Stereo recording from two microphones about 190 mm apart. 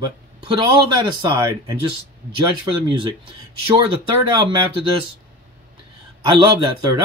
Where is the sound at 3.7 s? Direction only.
25° right (ahead or behind).